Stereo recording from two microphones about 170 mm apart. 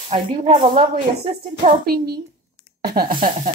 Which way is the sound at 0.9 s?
60° right (ahead or behind).